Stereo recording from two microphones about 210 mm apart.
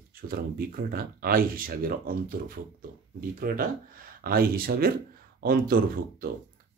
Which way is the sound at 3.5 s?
45° right (ahead or behind).